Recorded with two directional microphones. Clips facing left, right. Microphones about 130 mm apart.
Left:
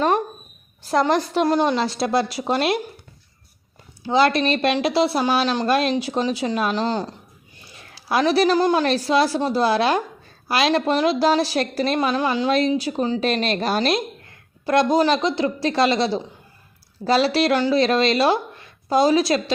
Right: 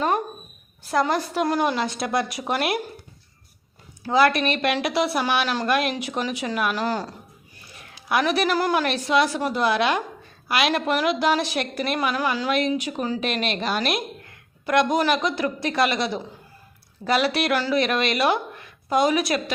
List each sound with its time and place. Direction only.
0.9 s a woman's voice: 30° left (ahead or behind)
4.0 s a woman's voice: 25° left (ahead or behind)
7.8 s a sound: 30° left (ahead or behind)
8.5 s a woman's voice: 25° left (ahead or behind)